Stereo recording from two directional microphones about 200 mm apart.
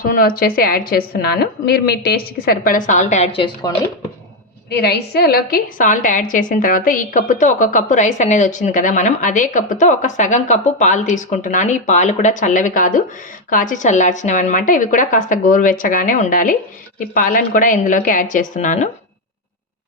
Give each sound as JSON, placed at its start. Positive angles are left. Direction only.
{"t": 0.0, "sound": "a woman's voice", "side_deg": 45}
{"t": 4.7, "sound": "a woman's voice", "side_deg": 55}